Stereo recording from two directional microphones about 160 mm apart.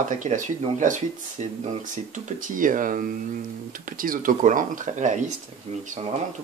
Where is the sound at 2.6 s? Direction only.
55° right (ahead or behind).